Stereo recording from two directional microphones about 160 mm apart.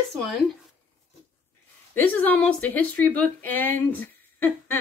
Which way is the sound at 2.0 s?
10° left (ahead or behind).